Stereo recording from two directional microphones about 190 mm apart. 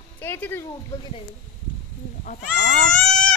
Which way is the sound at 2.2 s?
45° left (ahead or behind).